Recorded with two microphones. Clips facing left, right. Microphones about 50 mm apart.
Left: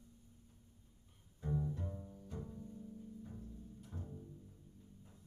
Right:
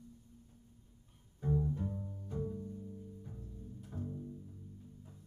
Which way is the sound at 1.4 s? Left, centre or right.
Centre.